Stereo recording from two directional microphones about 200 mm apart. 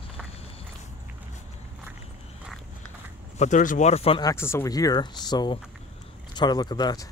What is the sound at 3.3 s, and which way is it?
Speech, 35° left (ahead or behind).